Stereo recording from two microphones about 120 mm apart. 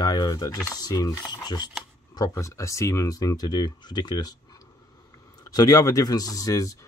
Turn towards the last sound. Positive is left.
turn(degrees=30)  # may be behind; listen again after turning